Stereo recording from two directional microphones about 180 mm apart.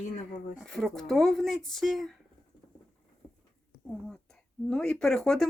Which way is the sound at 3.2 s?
5° left (ahead or behind).